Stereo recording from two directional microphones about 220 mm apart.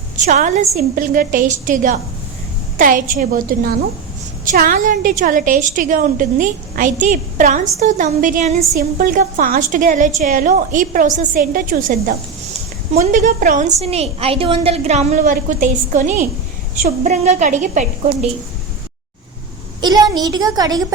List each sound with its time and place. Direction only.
0.3 s a woman's voice: 30° right (ahead or behind)
19.8 s a woman's voice: 15° right (ahead or behind)